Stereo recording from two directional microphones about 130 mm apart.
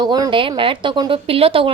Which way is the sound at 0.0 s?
35° right (ahead or behind).